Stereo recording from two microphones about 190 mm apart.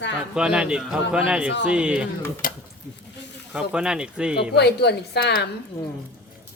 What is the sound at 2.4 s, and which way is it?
Speech, 50° left (ahead or behind).